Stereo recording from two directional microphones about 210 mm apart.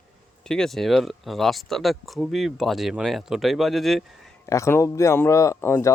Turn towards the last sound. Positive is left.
turn(degrees=10)  # may be behind; listen again after turning